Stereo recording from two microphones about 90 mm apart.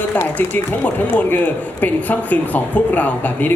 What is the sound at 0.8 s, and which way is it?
Speech, 15° left (ahead or behind).